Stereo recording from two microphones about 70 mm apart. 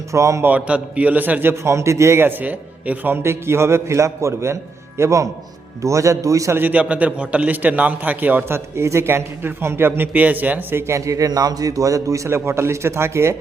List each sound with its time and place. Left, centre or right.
0.1 s a man's voice: right
0.4 s a man's voice: right
2.4 s a man's voice: right
6.6 s a man's voice: right
10.8 s a man's voice: right